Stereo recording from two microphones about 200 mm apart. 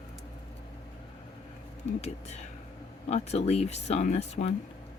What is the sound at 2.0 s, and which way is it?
Speech, 35° left (ahead or behind).